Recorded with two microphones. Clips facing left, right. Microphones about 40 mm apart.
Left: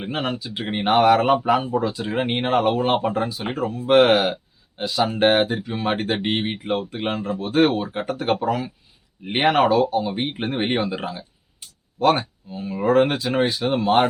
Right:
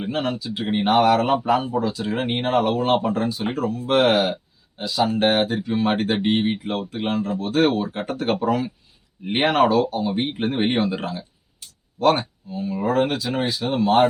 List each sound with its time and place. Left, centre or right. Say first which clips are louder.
0.0 s speech: right 1 dB; left
3.8 s speech: left 3 dB; left
4.1 s speech: left 1 dB; centre
5.6 s speech: right 2 dB; centre
7.0 s speech: right 1 dB; left
7.6 s speech: left 1 dB; centre
12.5 s speech: left 3 dB; left